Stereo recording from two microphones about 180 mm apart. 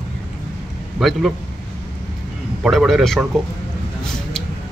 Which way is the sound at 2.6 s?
Centre (ahead or behind).